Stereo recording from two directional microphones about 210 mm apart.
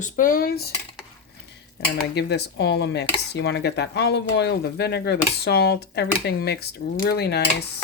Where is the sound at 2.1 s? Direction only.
50° left (ahead or behind).